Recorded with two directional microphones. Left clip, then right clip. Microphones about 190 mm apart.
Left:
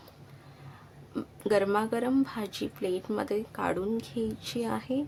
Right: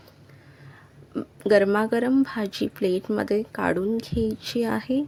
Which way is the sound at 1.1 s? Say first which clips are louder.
Right 8 dB; 20° right (ahead or behind).